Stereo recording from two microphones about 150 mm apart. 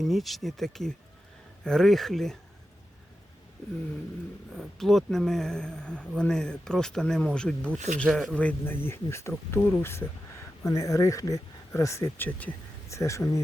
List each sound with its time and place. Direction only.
0.0 s speech: centre (ahead or behind)
4.5 s speech: centre (ahead or behind)
8.4 s speech: 10° left (ahead or behind)